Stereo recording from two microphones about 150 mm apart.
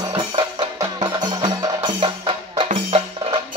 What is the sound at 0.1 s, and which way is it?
Music, 35° right (ahead or behind).